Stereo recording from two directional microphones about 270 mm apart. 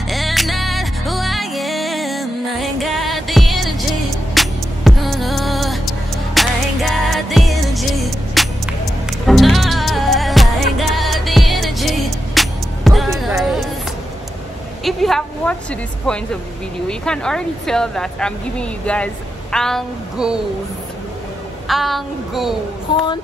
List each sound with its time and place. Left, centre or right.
0.1 s music: centre
14.9 s speech: centre
17.0 s speech: centre
21.6 s speech: centre
22.9 s speech: centre